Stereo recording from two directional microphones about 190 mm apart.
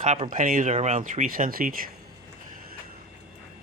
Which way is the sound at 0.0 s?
40° right (ahead or behind).